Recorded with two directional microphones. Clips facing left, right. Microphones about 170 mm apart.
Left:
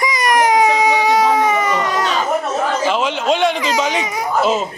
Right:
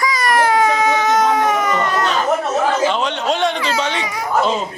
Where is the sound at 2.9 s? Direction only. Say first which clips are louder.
Left 2 dB; centre (ahead or behind).